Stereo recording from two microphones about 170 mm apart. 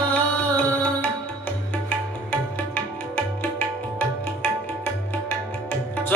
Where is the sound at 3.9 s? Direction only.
10° left (ahead or behind).